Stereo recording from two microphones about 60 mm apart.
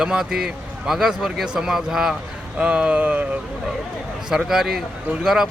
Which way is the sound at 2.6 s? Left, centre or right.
Right.